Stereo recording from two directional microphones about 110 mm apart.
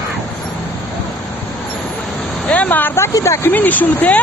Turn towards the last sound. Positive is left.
turn(degrees=15)  # may be behind; listen again after turning